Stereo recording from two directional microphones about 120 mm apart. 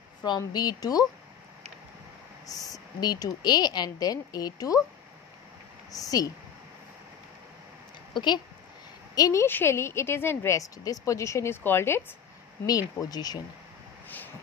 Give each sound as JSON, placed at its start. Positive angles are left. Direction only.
{"t": 0.4, "sound": "speech", "side_deg": 35}
{"t": 2.4, "sound": "speech", "side_deg": 30}
{"t": 5.9, "sound": "a woman's voice", "side_deg": 30}
{"t": 8.1, "sound": "speech", "side_deg": 40}
{"t": 9.1, "sound": "a woman's voice", "side_deg": 25}
{"t": 12.6, "sound": "speech", "side_deg": 30}
{"t": 14.0, "sound": "vehicle", "side_deg": 15}